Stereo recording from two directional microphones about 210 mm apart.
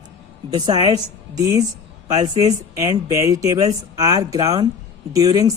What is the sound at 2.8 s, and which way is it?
Speech, 15° right (ahead or behind).